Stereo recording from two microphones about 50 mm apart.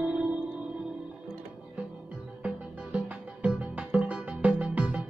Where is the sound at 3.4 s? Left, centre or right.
Right.